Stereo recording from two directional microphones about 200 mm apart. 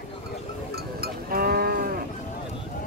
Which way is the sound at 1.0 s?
50° right (ahead or behind).